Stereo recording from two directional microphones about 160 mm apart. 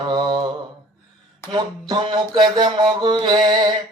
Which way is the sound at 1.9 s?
25° right (ahead or behind).